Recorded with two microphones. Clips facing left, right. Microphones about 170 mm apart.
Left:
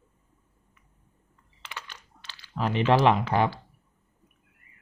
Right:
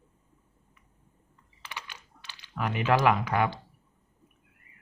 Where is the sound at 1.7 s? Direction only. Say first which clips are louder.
Even; 15° right (ahead or behind).